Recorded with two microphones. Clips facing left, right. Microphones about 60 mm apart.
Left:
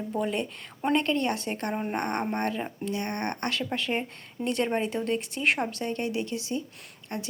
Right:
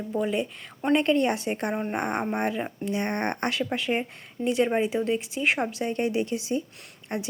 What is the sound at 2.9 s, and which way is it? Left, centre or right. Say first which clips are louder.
Speech: right 4 dB; right.